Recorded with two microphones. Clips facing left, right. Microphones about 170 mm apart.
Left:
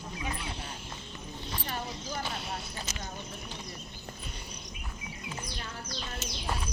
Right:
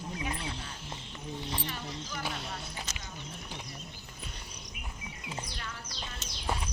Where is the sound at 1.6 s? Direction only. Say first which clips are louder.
Left 3 dB; 40° left (ahead or behind).